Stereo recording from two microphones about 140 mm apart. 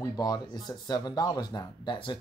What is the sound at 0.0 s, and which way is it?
Speech, 25° left (ahead or behind).